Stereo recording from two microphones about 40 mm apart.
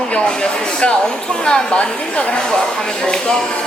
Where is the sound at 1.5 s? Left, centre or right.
Left.